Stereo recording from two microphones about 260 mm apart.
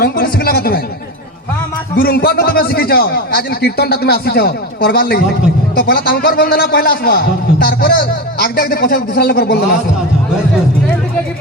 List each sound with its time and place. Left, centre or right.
0.0 s speech: left
2.0 s a man's voice: left